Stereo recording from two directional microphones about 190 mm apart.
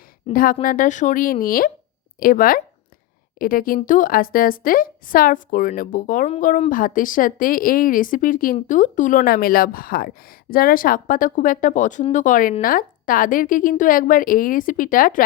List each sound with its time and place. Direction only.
0.3 s a woman's voice: 45° left (ahead or behind)